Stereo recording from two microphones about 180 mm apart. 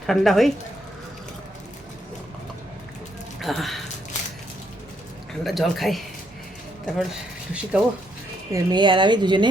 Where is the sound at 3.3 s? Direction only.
Centre (ahead or behind).